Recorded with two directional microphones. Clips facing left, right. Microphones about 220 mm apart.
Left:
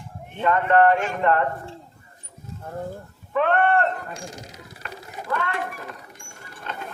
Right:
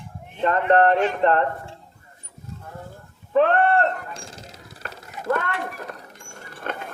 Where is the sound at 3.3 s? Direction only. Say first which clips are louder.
Right 2 dB; 35° right (ahead or behind).